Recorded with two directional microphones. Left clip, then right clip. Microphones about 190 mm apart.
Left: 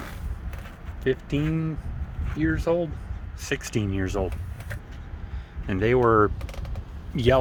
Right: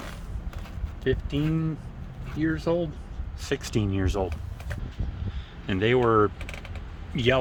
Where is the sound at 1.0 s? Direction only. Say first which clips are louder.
Left 1 dB; 10° left (ahead or behind).